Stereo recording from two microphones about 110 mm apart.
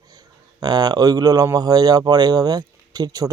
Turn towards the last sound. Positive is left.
turn(degrees=-35)  # may be behind; listen again after turning